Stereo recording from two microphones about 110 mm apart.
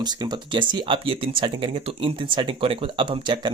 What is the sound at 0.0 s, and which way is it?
Speech, 40° right (ahead or behind).